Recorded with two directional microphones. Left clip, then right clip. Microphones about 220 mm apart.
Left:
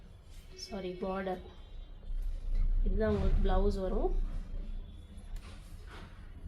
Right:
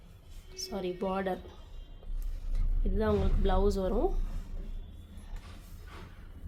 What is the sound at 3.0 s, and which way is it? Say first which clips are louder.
Speech: right 3 dB; 50° right (ahead or behind).